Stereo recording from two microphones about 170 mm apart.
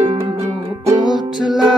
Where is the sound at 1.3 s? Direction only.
5° right (ahead or behind).